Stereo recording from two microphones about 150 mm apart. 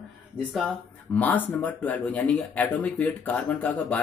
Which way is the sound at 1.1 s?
10° left (ahead or behind).